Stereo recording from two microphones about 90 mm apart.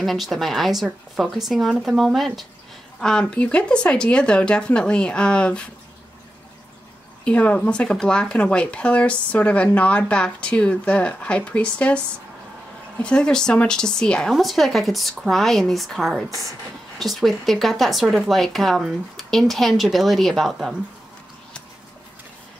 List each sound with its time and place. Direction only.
0.0 s speech: centre (ahead or behind)
7.2 s speech: 15° left (ahead or behind)
13.0 s speech: 10° left (ahead or behind)